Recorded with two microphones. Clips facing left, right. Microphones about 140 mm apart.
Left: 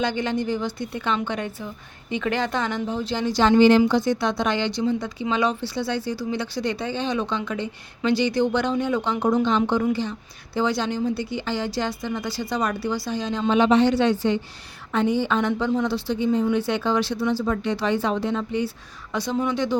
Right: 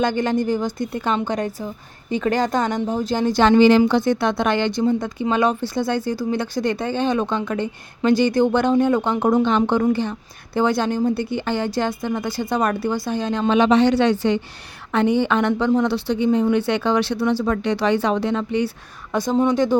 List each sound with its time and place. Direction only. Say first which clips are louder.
0.0 s a woman's voice: right 4 dB; 45° right (ahead or behind)
3.4 s a woman's voice: right 2 dB; 80° right
19.1 s a woman's voice: right 6 dB; 45° right (ahead or behind)